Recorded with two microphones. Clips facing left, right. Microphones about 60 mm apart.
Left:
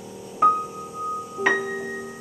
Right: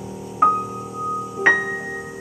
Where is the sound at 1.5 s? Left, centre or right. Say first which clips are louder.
Right 5 dB; right.